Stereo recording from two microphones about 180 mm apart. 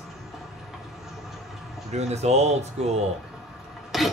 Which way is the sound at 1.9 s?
35° right (ahead or behind).